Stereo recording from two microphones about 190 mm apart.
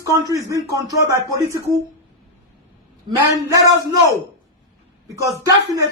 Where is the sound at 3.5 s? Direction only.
15° right (ahead or behind).